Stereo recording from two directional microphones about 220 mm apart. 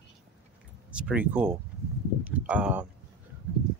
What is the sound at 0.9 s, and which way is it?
Speech, 5° right (ahead or behind).